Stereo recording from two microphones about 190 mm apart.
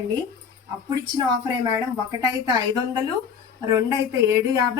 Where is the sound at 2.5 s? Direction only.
20° right (ahead or behind).